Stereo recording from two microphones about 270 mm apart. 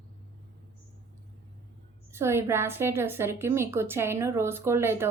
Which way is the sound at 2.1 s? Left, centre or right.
Centre.